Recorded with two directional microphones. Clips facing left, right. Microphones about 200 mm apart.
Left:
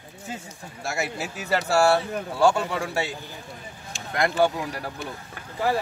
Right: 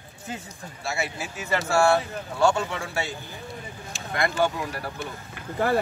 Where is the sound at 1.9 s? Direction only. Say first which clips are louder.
Left 1 dB; 35° left (ahead or behind).